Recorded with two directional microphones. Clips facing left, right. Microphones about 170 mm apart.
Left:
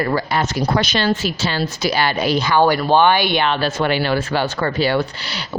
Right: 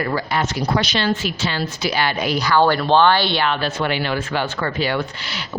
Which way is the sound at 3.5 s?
35° left (ahead or behind).